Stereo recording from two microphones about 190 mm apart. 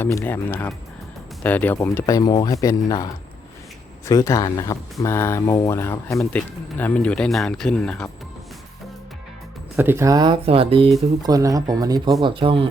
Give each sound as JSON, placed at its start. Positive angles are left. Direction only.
{"t": 0.0, "sound": "speech", "side_deg": 10}
{"t": 9.7, "sound": "speech", "side_deg": -10}
{"t": 11.2, "sound": "speech", "side_deg": -20}